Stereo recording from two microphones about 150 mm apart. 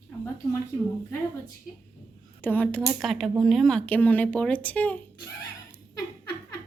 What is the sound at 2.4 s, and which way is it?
Speech, 10° left (ahead or behind).